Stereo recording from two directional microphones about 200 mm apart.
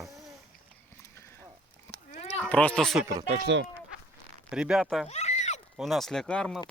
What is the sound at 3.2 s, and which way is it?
Speech, 40° right (ahead or behind).